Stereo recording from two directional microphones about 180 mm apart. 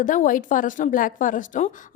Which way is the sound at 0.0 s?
45° left (ahead or behind).